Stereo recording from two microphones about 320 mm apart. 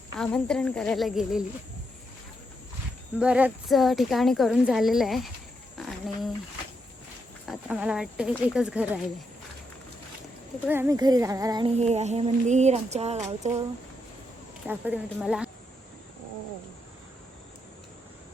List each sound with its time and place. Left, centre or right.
0.2 s a woman's voice: centre
3.2 s a woman's voice: centre
5.7 s a sound: centre
7.4 s a woman's voice: centre
10.7 s a sound: centre
14.7 s a woman's voice: centre